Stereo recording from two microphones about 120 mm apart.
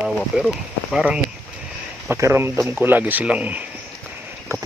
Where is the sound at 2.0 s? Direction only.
20° right (ahead or behind).